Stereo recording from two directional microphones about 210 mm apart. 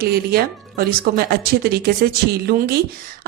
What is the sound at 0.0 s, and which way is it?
A woman's voice, 45° right (ahead or behind).